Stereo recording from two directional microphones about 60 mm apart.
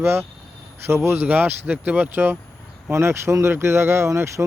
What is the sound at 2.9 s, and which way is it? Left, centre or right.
Speech, right.